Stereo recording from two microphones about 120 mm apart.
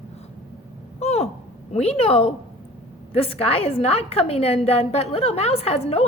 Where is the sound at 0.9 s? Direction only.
60° left (ahead or behind).